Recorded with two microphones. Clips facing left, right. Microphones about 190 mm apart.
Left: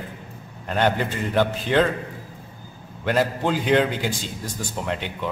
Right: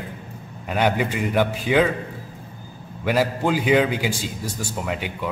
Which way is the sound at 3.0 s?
10° right (ahead or behind).